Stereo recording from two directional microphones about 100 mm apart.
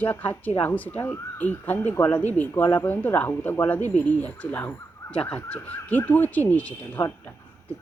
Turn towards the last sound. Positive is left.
turn(degrees=15)  # may be behind; listen again after turning